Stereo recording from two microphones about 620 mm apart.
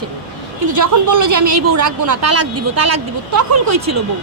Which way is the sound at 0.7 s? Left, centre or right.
Right.